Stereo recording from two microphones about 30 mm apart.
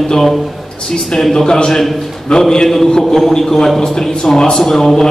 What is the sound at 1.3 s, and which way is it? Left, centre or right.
A man's voice, centre.